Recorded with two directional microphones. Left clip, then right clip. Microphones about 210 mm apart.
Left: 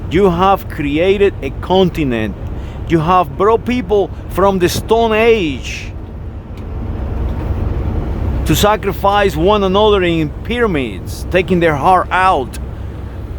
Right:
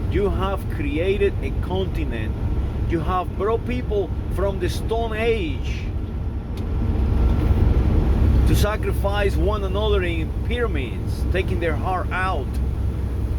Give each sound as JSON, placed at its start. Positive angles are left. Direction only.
{"t": 0.1, "sound": "speech", "side_deg": 40}
{"t": 8.4, "sound": "speech", "side_deg": 40}